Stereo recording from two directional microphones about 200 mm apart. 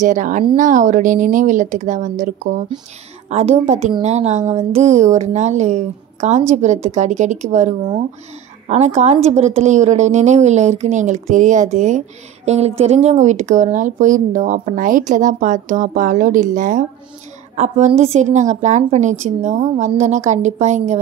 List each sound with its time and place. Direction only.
0.0 s a woman's voice: 40° right (ahead or behind)